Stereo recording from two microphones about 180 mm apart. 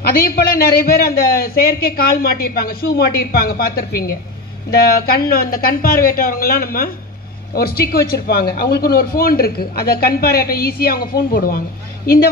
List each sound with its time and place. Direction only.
0.6 s speech: 60° left (ahead or behind)